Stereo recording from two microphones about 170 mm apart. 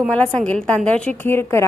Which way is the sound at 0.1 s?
5° left (ahead or behind).